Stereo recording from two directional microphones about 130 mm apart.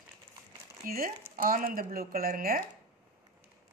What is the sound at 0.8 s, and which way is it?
Speech, 90° right.